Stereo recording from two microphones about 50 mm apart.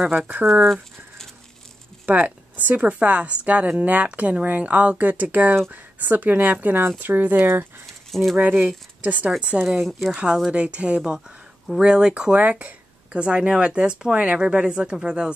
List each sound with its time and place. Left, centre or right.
0.0 s speech: centre
0.7 s speech: centre
2.0 s speech: right
8.1 s speech: centre
8.4 s speech: right
9.6 s speech: centre
10.5 s speech: right
11.0 s speech: centre